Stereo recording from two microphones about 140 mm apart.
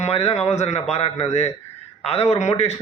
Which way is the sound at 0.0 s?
45° left (ahead or behind).